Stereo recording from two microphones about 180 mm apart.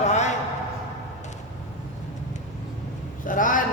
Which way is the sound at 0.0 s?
40° left (ahead or behind).